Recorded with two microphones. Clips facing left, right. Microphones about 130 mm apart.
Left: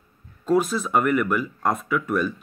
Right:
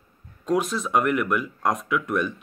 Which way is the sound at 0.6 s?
5° left (ahead or behind).